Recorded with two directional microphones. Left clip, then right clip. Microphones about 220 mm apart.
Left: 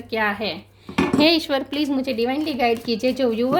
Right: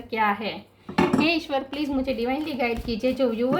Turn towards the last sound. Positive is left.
turn(degrees=50)  # may be behind; listen again after turning